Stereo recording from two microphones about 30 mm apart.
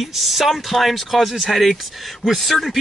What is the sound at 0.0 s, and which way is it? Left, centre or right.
Speech, centre.